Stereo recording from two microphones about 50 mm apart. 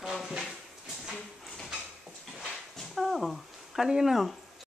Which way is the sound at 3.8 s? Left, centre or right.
Centre.